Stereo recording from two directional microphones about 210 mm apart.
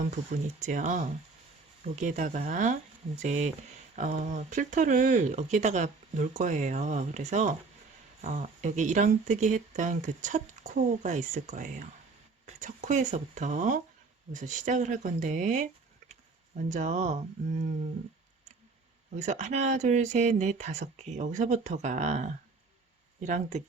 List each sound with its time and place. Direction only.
0.0 s speech: 35° right (ahead or behind)
19.2 s speech: 35° right (ahead or behind)